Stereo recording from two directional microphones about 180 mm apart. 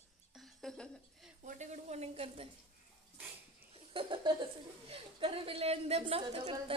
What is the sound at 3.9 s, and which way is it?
Laughter, 30° right (ahead or behind).